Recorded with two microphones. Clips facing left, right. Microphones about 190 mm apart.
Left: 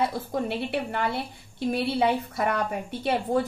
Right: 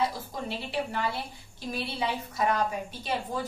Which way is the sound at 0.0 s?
60° left (ahead or behind).